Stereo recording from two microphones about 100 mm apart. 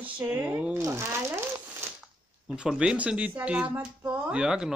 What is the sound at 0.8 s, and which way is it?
Speech, 30° right (ahead or behind).